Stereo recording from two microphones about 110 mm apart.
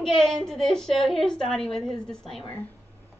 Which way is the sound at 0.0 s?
5° left (ahead or behind).